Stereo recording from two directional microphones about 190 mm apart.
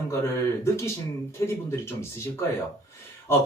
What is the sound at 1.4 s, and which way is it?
Speech, 15° left (ahead or behind).